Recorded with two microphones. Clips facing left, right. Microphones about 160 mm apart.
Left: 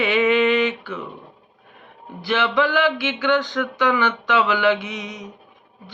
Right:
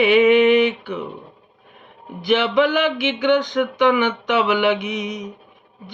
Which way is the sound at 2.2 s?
20° right (ahead or behind).